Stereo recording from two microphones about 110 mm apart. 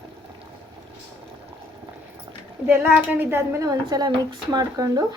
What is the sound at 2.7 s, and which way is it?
A woman's voice, 20° right (ahead or behind).